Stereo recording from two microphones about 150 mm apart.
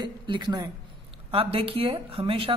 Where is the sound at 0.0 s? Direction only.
30° right (ahead or behind).